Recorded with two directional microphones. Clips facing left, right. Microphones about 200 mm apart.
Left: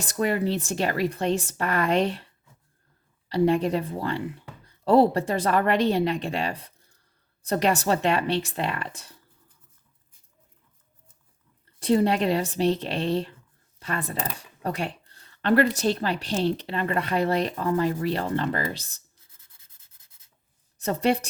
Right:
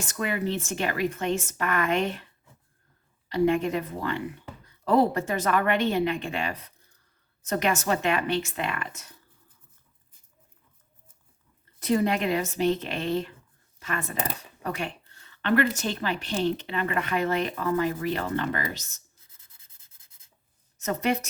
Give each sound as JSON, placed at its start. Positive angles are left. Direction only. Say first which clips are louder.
{"t": 0.0, "sound": "a woman's voice", "louder": "left 4 dB", "side_deg": 35}
{"t": 3.2, "sound": "a woman's voice", "louder": "left 2 dB", "side_deg": 35}
{"t": 11.8, "sound": "a woman's voice", "louder": "left 3 dB", "side_deg": 30}
{"t": 20.7, "sound": "a woman's voice", "louder": "left 3 dB", "side_deg": 35}